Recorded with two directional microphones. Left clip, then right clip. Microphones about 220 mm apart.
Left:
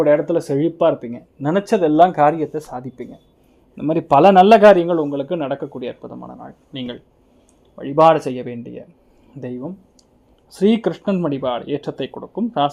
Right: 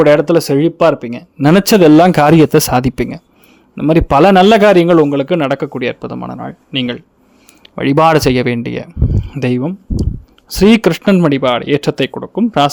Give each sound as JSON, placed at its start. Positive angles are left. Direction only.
{"t": 0.0, "sound": "speech", "side_deg": -30}
{"t": 1.4, "sound": "speech", "side_deg": -40}
{"t": 2.1, "sound": "speech", "side_deg": -60}
{"t": 3.8, "sound": "speech", "side_deg": -30}
{"t": 4.7, "sound": "speech", "side_deg": -30}
{"t": 7.8, "sound": "speech", "side_deg": -40}